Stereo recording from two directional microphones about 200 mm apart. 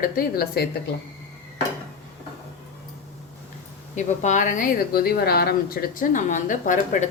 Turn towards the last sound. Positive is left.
turn(degrees=40)  # may be behind; listen again after turning